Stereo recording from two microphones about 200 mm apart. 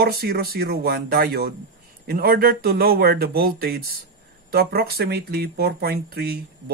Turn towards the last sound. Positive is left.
turn(degrees=-50)  # may be behind; listen again after turning